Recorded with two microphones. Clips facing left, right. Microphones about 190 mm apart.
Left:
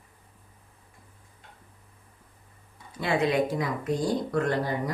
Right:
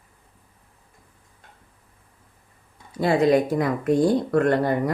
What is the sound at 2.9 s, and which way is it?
Speech, 40° right (ahead or behind).